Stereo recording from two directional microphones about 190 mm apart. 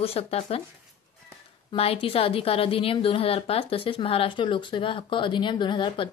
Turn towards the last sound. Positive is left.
turn(degrees=25)  # may be behind; listen again after turning